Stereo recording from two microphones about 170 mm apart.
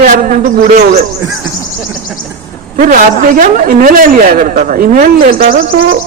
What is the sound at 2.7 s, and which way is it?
A woman's voice, 50° right (ahead or behind).